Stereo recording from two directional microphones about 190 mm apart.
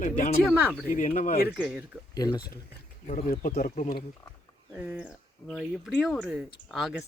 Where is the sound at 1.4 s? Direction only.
5° right (ahead or behind).